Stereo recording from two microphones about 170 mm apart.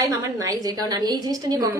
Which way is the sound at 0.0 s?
20° right (ahead or behind).